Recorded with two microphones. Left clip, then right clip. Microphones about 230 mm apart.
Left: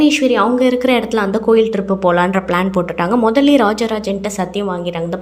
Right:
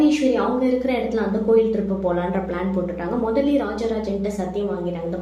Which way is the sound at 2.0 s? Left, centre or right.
Left.